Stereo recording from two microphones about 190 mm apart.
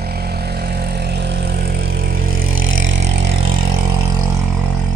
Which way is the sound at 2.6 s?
90° right.